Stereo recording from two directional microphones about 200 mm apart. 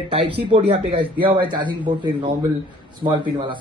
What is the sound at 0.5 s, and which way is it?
Speech, 30° right (ahead or behind).